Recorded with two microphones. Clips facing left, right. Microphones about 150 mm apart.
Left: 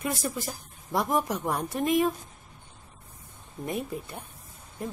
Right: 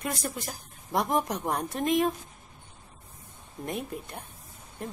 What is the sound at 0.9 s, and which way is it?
Speech, 20° right (ahead or behind).